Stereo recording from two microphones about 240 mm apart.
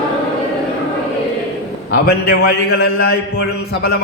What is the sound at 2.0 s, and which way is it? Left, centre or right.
A man's voice, left.